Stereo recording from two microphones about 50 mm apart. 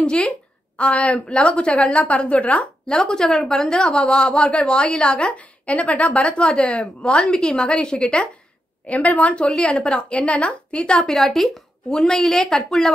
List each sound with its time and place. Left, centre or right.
0.0 s a woman's voice: centre
2.9 s a woman's voice: centre
8.8 s a woman's voice: left
9.5 s a woman's voice: centre
11.1 s a woman's voice: centre